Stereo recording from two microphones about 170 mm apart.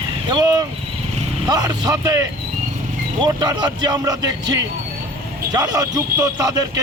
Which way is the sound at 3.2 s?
25° right (ahead or behind).